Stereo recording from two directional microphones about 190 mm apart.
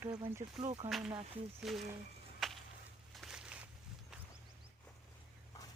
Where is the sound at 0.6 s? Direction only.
35° right (ahead or behind).